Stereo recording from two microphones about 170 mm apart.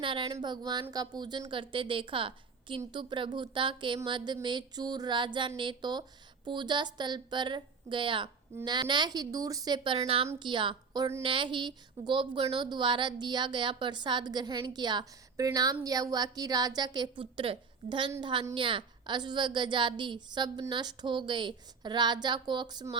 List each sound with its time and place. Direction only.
0.0 s a woman's voice: 30° right (ahead or behind)